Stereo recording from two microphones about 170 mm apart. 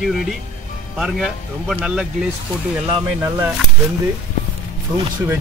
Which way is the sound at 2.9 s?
20° right (ahead or behind).